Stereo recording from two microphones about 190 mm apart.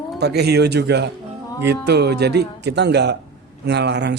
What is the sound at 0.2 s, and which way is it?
A woman's voice, 60° right (ahead or behind).